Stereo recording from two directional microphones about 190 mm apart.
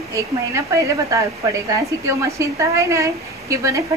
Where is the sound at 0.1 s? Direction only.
15° right (ahead or behind).